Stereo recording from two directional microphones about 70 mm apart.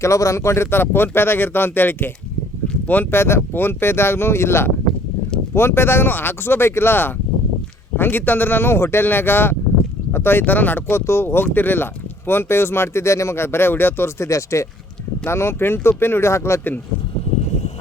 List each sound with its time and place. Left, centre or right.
0.0 s speech: left
14.3 s speech: left